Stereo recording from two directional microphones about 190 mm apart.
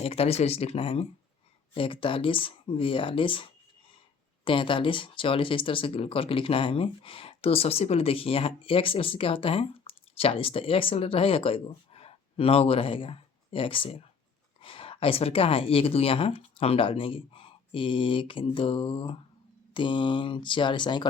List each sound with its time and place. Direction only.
0.0 s speech: 30° left (ahead or behind)